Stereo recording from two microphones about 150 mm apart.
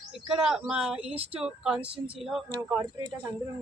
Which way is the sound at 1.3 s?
5° right (ahead or behind).